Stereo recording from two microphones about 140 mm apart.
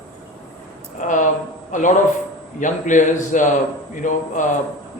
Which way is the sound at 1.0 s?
65° left (ahead or behind).